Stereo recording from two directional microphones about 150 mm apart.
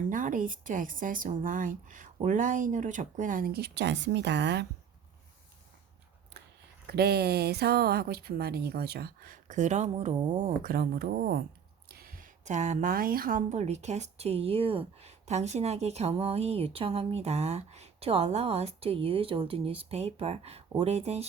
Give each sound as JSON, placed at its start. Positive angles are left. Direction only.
{"t": 0.1, "sound": "speech", "side_deg": -60}
{"t": 6.8, "sound": "a woman's voice", "side_deg": -90}